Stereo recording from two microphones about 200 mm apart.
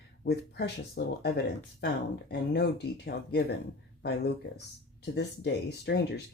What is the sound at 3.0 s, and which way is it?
Speech, 55° left (ahead or behind).